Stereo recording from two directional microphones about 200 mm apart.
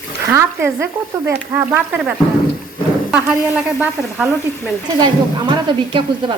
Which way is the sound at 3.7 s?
5° right (ahead or behind).